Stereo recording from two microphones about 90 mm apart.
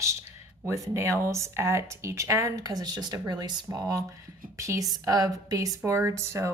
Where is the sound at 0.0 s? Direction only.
30° right (ahead or behind).